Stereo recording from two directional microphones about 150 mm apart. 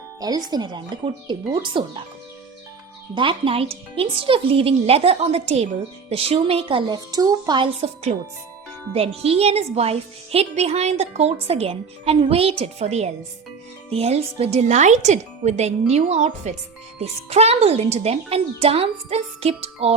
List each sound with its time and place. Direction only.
0.2 s speech: 25° right (ahead or behind)
3.2 s speech: 35° right (ahead or behind)
8.9 s a woman's voice: 40° right (ahead or behind)